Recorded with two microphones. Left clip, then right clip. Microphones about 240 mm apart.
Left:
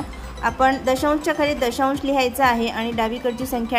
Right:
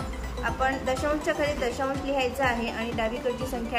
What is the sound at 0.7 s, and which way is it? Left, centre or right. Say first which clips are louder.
Speech: left 8 dB; left.